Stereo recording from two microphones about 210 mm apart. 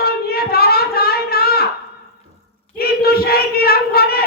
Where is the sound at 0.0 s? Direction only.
45° left (ahead or behind).